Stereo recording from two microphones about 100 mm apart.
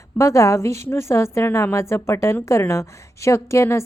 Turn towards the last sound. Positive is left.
turn(degrees=25)  # may be behind; listen again after turning